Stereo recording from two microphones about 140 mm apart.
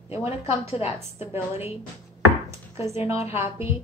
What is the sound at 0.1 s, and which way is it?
Speech, 45° left (ahead or behind).